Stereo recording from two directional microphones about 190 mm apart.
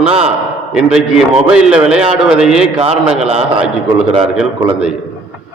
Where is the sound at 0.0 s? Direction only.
30° right (ahead or behind).